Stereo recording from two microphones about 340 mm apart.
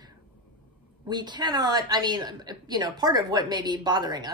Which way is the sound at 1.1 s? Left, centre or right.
Centre.